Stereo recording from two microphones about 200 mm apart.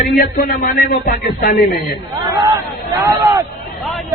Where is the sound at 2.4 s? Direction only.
15° right (ahead or behind).